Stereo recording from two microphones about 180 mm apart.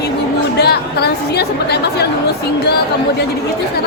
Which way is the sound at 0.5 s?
65° left (ahead or behind).